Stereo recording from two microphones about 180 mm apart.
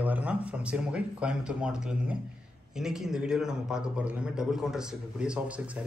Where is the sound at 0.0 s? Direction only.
10° right (ahead or behind).